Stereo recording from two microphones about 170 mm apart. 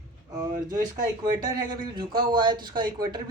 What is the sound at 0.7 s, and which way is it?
Speech, 20° right (ahead or behind).